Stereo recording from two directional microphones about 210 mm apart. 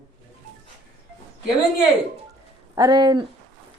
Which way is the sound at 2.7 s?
15° right (ahead or behind).